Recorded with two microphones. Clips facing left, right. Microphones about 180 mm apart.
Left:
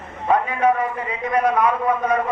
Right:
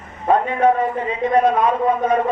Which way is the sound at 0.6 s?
25° right (ahead or behind).